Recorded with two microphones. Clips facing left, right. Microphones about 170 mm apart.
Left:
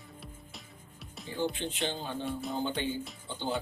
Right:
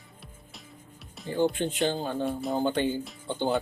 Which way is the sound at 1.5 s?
50° right (ahead or behind).